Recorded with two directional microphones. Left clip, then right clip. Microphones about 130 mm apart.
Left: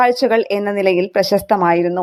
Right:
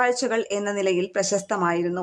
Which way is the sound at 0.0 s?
30° left (ahead or behind).